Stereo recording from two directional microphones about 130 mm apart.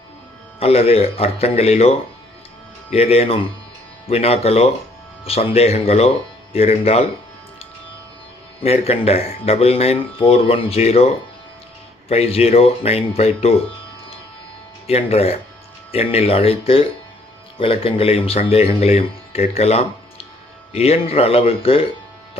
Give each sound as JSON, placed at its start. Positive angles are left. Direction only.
{"t": 0.6, "sound": "speech", "side_deg": 50}
{"t": 8.6, "sound": "speech", "side_deg": 50}
{"t": 14.8, "sound": "speech", "side_deg": 50}